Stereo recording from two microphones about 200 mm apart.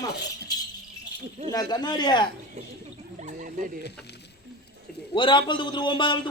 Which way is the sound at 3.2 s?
40° right (ahead or behind).